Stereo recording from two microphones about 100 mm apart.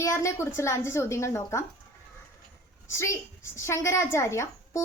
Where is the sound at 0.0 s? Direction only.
30° left (ahead or behind).